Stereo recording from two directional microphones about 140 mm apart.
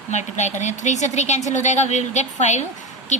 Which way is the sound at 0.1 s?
55° left (ahead or behind).